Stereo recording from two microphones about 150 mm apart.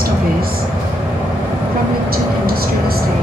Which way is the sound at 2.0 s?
90° right.